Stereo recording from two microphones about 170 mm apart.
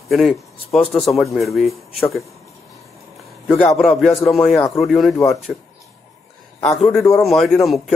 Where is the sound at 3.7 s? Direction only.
Centre (ahead or behind).